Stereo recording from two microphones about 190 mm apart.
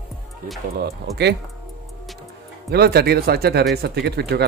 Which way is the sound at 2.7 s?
55° right (ahead or behind).